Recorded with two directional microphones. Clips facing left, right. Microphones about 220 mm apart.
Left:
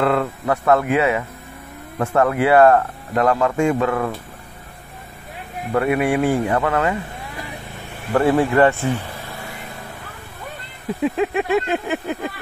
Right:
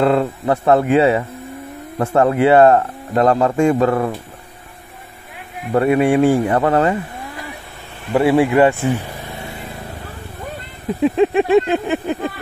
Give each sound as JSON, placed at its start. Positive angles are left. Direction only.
{"t": 0.0, "sound": "speech", "side_deg": -30}
{"t": 5.8, "sound": "speech", "side_deg": -25}
{"t": 8.1, "sound": "speech", "side_deg": -10}
{"t": 11.1, "sound": "speech", "side_deg": -30}